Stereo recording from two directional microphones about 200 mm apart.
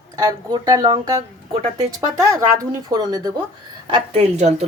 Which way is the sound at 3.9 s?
30° right (ahead or behind).